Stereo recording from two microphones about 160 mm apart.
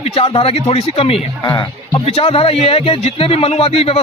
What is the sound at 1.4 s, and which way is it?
Speech, 25° left (ahead or behind).